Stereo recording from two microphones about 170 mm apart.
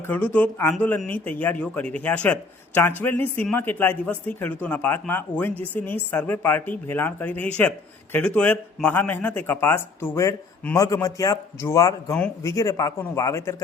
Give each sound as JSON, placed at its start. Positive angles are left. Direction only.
{"t": 0.1, "sound": "speech", "side_deg": 10}